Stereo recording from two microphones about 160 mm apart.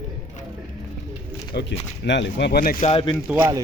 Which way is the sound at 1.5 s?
90° left.